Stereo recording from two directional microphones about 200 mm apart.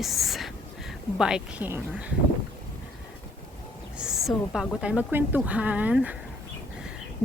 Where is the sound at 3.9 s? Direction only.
Centre (ahead or behind).